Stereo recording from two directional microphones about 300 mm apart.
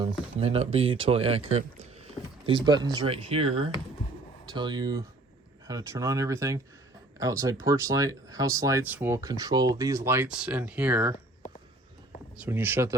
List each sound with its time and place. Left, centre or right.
0.0 s speech: centre
12.5 s speech: centre